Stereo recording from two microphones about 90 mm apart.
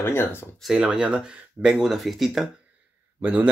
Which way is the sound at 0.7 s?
10° right (ahead or behind).